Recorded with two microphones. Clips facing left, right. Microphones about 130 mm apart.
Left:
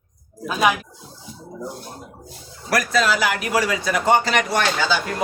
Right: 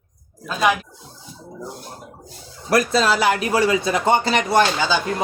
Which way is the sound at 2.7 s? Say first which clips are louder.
Right 2 dB; 30° right (ahead or behind).